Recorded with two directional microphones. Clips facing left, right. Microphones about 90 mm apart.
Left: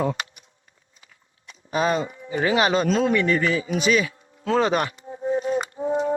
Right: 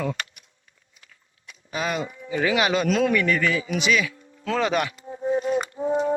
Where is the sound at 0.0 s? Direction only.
30° left (ahead or behind).